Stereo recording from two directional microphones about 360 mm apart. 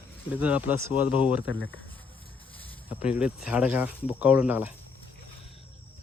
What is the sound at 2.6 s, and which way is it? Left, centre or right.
Speech, centre.